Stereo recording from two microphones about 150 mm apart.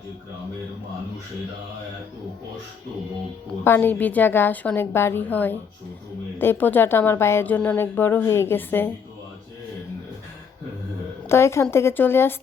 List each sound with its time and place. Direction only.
3.6 s a woman's voice: 15° left (ahead or behind)
11.3 s a woman's voice: 15° left (ahead or behind)